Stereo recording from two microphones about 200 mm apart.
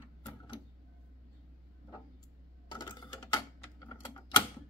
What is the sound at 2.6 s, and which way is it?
Typing, 20° left (ahead or behind).